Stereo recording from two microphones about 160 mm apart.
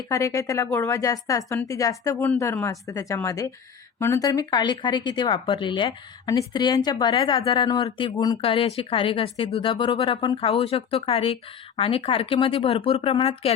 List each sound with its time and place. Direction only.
0.1 s speech: 20° left (ahead or behind); by 13.5 s 35° left (ahead or behind)